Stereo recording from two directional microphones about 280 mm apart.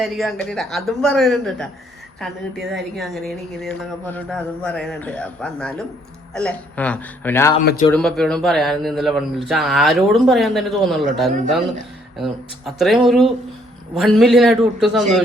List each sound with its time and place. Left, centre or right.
0.0 s a man's voice: centre
7.6 s speech: left
7.9 s a man's voice: centre